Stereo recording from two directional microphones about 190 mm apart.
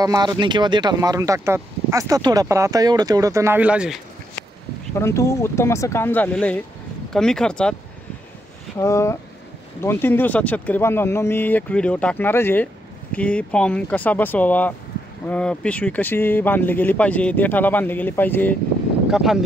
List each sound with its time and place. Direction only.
0.0 s speech: 20° right (ahead or behind)
4.9 s speech: 15° left (ahead or behind)
8.7 s speech: 15° left (ahead or behind)
19.0 s speech: 5° right (ahead or behind)